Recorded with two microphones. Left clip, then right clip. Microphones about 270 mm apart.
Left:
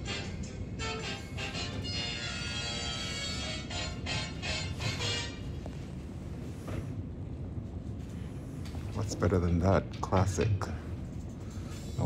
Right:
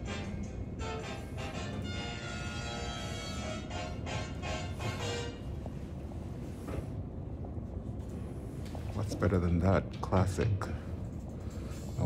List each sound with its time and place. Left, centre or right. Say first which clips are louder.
2.2 s music: left 4 dB; right
9.1 s speech: left 2 dB; centre